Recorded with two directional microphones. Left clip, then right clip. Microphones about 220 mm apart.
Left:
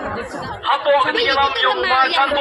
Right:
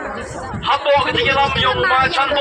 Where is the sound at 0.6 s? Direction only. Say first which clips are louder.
Right 1 dB; 35° right (ahead or behind).